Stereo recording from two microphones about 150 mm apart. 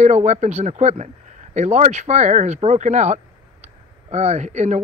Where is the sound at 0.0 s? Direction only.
50° right (ahead or behind).